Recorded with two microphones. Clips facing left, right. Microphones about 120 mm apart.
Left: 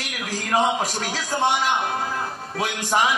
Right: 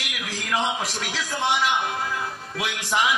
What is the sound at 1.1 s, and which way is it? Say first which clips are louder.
A man's voice: left 2 dB; 45° left (ahead or behind).